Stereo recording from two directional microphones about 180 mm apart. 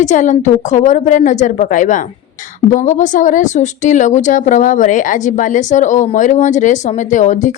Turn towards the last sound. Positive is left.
turn(degrees=45)  # may be behind; listen again after turning